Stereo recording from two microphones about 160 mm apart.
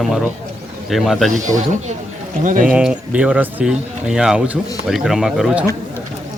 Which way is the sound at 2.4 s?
55° right (ahead or behind).